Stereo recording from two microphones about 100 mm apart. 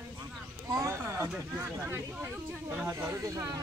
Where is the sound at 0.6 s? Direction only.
35° right (ahead or behind).